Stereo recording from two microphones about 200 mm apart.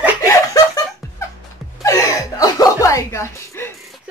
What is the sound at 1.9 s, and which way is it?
Speech, 15° left (ahead or behind).